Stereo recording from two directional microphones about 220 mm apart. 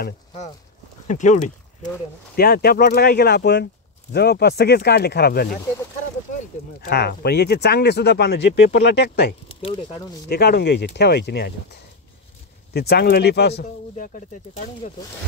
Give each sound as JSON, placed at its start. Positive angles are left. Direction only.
{"t": 1.0, "sound": "speech", "side_deg": 35}
{"t": 2.3, "sound": "speech", "side_deg": 45}
{"t": 6.8, "sound": "speech", "side_deg": 45}
{"t": 9.5, "sound": "speech", "side_deg": 25}
{"t": 10.3, "sound": "speech", "side_deg": 45}